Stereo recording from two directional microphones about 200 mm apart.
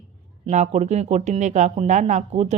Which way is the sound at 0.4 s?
35° right (ahead or behind).